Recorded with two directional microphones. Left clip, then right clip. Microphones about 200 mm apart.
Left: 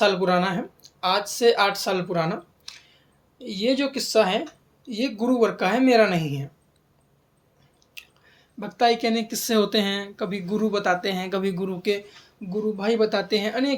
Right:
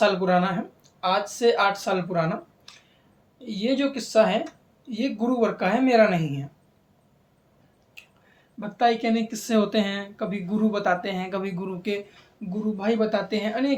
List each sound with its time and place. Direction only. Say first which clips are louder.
0.0 s speech: left 1 dB; 45° left (ahead or behind)
8.0 s squish: left 4 dB; 45° left (ahead or behind)
8.5 s speech: left 1 dB; 50° left (ahead or behind)